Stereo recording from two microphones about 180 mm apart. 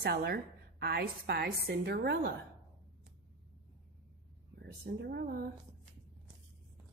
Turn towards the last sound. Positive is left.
turn(degrees=-55)  # may be behind; listen again after turning